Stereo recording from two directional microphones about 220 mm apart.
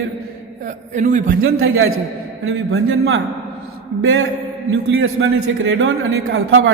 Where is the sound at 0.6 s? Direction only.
35° right (ahead or behind).